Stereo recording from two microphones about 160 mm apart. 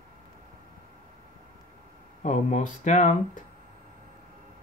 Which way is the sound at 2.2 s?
50° left (ahead or behind).